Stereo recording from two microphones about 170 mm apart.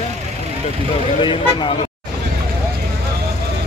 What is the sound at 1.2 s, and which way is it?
Speech, 30° left (ahead or behind).